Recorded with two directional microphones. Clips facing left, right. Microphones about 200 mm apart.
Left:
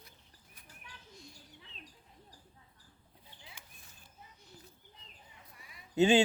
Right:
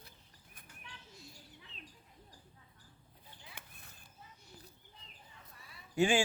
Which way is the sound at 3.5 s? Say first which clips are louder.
Right 2 dB; 60° right (ahead or behind).